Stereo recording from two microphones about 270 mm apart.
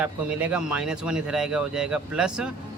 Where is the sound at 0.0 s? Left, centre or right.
Centre.